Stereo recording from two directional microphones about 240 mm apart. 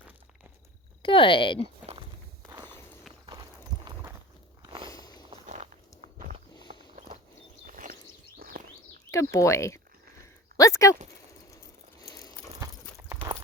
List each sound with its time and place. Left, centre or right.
1.0 s speech: left
2.6 s walk: centre
4.6 s walk: right
4.9 s walk: centre
5.5 s walk: right
7.7 s a sound: right
8.4 s chirp: right
9.1 s speech: centre
10.6 s a sound: centre
12.0 s a sound: centre